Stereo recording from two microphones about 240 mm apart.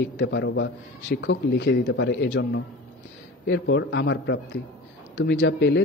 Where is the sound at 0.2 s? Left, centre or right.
Left.